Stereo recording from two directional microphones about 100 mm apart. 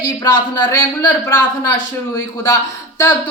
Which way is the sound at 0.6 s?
25° left (ahead or behind).